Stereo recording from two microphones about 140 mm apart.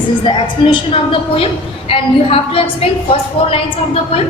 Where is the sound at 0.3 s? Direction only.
35° left (ahead or behind).